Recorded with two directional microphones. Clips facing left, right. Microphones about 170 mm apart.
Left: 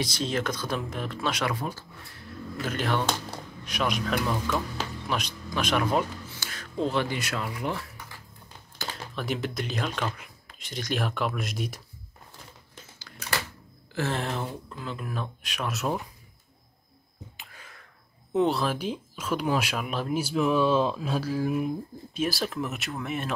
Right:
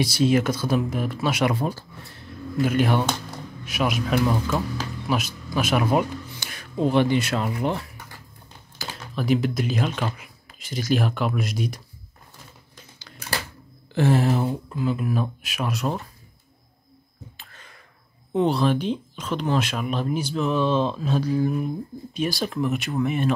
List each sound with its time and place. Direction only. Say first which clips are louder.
0.0 s speech: right 9 dB; 10° right (ahead or behind)
1.5 s speech: right 6 dB; 30° right (ahead or behind)
2.6 s speech: right 7 dB; 10° right (ahead or behind)
4.7 s a sound: right 5 dB; 5° right (ahead or behind)
7.0 s speech: right 8 dB; 25° right (ahead or behind)
8.7 s speech: right 4 dB; centre (ahead or behind)
13.9 s speech: right 9 dB; 10° right (ahead or behind); by 16.1 s 5° left (ahead or behind)
17.4 s a sound: even; 10° left (ahead or behind)
18.3 s speech: right 4 dB; centre (ahead or behind)